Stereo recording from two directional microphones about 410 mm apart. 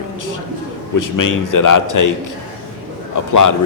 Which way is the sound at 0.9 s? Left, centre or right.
Left.